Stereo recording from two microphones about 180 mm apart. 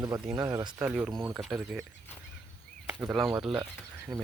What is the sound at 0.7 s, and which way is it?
Speech, 10° right (ahead or behind).